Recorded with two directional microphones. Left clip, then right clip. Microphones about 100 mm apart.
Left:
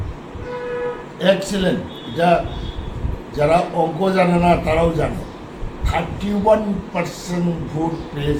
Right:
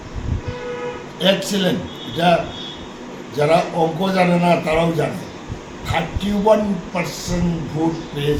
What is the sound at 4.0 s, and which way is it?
Speech, centre (ahead or behind).